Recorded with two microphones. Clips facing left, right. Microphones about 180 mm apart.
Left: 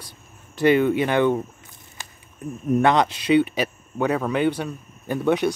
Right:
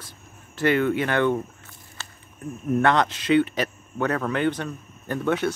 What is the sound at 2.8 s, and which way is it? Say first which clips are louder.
Speech: left 2 dB; 15° left (ahead or behind).